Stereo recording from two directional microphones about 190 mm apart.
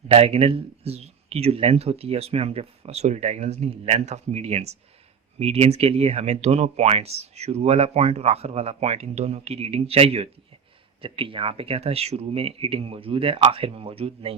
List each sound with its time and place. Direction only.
0.1 s speech: 30° right (ahead or behind)